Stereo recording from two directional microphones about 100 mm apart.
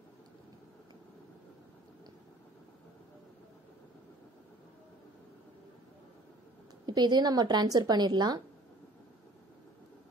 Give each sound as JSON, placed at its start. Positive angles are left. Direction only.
{"t": 6.9, "sound": "a woman's voice", "side_deg": -45}